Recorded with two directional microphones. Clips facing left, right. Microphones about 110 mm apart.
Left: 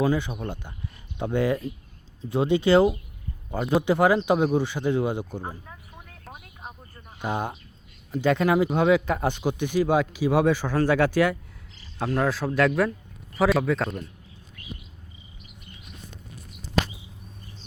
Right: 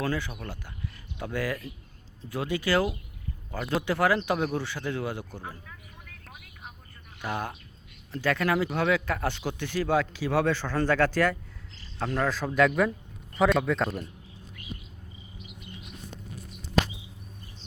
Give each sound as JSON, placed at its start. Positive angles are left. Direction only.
{"t": 0.0, "sound": "speech", "side_deg": 20}
{"t": 5.6, "sound": "a sound", "side_deg": 30}
{"t": 6.3, "sound": "vehicle", "side_deg": 40}
{"t": 7.2, "sound": "speech", "side_deg": 20}